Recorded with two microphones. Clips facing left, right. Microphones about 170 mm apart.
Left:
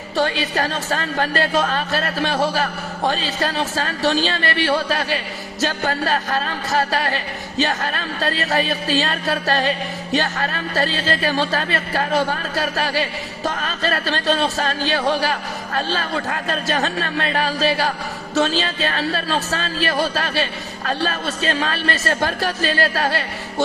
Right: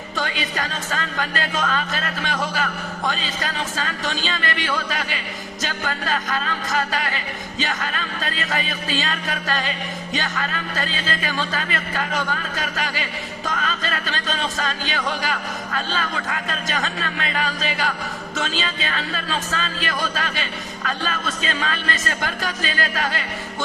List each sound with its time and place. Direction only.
0.2 s speech: 35° left (ahead or behind)